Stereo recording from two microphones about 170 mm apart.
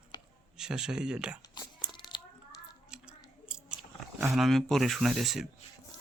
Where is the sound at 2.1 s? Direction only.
25° left (ahead or behind).